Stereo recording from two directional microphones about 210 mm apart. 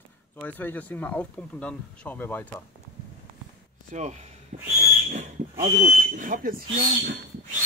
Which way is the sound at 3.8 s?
35° right (ahead or behind).